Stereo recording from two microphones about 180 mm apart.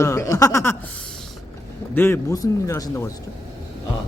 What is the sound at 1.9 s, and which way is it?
Speech, 15° left (ahead or behind).